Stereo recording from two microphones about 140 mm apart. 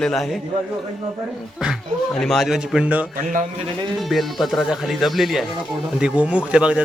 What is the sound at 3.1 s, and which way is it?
Speech, 70° right (ahead or behind).